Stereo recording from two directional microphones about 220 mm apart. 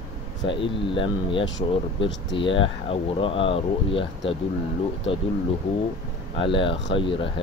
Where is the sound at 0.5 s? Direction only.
25° left (ahead or behind).